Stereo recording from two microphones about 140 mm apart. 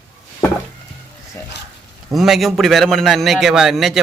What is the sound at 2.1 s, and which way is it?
A man's voice, centre (ahead or behind).